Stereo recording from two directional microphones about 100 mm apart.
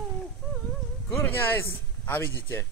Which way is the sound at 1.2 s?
20° left (ahead or behind).